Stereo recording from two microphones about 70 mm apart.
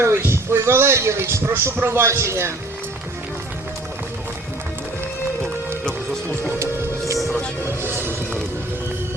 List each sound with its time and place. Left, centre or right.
0.0 s a man's voice: right
6.6 s music: right
7.8 s vehicle: right